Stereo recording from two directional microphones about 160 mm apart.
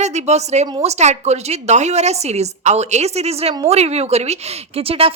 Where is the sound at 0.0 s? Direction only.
45° right (ahead or behind).